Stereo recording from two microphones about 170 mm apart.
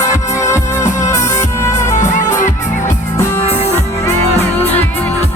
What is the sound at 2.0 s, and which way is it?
Music, 45° left (ahead or behind).